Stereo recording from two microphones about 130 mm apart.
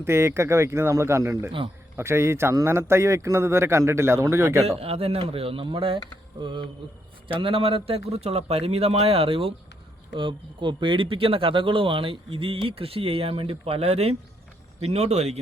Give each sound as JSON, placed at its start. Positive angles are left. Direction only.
{"t": 0.0, "sound": "a man's voice", "side_deg": -20}
{"t": 4.8, "sound": "speech", "side_deg": -50}